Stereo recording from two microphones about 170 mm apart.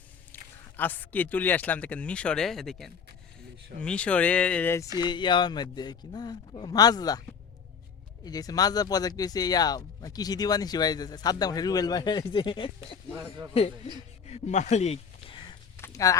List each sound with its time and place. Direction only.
0.3 s a sound: 10° left (ahead or behind)
0.8 s speech: 10° left (ahead or behind)
4.9 s speech: 25° left (ahead or behind)
8.2 s speech: 20° left (ahead or behind)
13.1 s speech: 15° right (ahead or behind)
13.5 s speech: 35° left (ahead or behind)
15.8 s a sound: 20° left (ahead or behind)